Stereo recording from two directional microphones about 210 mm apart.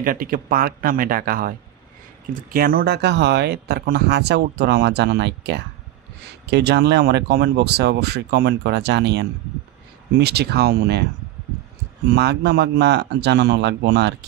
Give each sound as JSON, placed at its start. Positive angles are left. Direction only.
{"t": 0.0, "sound": "speech", "side_deg": -40}
{"t": 2.5, "sound": "speech", "side_deg": -45}
{"t": 12.1, "sound": "speech", "side_deg": -50}